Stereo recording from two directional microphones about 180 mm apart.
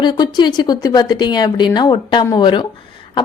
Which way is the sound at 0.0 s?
25° left (ahead or behind).